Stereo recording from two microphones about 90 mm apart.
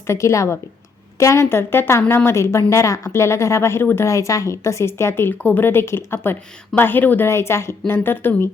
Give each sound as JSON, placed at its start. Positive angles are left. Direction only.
{"t": 0.1, "sound": "a woman's voice", "side_deg": 35}